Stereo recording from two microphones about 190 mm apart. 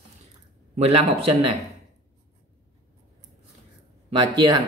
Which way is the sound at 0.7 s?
35° right (ahead or behind).